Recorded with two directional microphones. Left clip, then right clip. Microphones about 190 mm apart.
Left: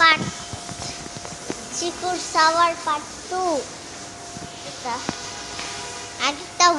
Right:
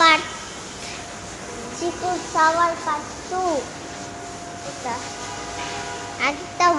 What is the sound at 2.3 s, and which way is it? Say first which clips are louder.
Speech: left 1 dB; 20° left (ahead or behind).